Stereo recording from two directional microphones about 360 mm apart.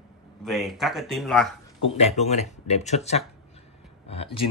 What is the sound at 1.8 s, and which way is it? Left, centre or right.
Speech, centre.